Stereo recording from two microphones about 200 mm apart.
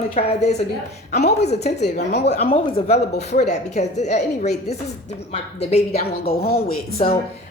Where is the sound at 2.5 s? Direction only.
30° left (ahead or behind).